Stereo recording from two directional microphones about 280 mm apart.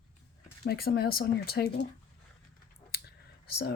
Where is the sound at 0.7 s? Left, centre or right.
Left.